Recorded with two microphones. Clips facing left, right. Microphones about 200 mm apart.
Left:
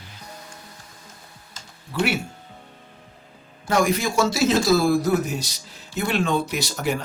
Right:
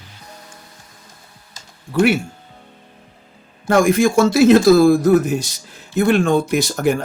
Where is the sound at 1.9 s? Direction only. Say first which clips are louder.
Right 8 dB; 50° right (ahead or behind).